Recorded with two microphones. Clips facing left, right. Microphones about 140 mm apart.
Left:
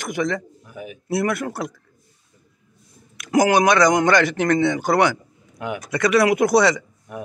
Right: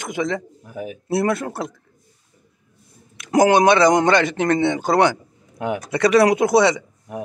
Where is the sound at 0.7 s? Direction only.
40° right (ahead or behind).